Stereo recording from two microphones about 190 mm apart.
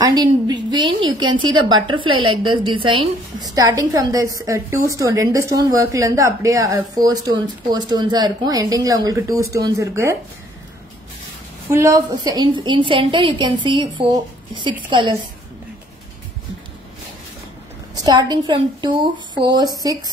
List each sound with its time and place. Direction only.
0.1 s a woman's voice: 25° right (ahead or behind)
11.7 s a woman's voice: 20° right (ahead or behind)
17.9 s a woman's voice: 20° right (ahead or behind)